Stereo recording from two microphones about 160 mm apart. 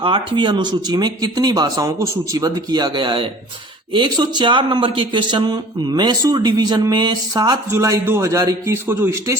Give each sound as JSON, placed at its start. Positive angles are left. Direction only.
{"t": 0.0, "sound": "speech", "side_deg": -30}